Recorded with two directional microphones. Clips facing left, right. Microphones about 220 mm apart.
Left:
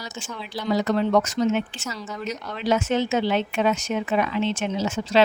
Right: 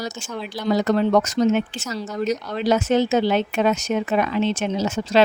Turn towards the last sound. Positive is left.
turn(degrees=-40)  # may be behind; listen again after turning